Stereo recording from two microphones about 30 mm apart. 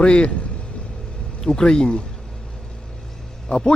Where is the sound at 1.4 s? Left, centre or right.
Left.